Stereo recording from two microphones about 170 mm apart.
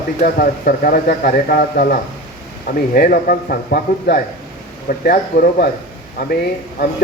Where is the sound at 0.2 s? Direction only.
55° left (ahead or behind).